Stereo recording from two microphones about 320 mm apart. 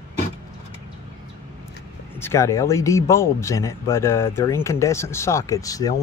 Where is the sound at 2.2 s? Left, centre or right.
Centre.